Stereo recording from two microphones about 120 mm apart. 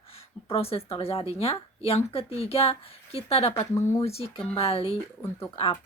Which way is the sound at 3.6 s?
25° left (ahead or behind).